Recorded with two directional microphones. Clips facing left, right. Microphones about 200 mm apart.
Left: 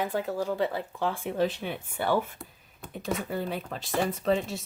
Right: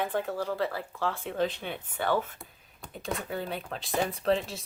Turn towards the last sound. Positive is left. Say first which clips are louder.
# left 1 dB
turn(degrees=0)  # may be behind; listen again after turning